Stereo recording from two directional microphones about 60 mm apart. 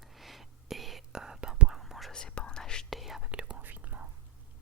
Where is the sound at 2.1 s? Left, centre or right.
Centre.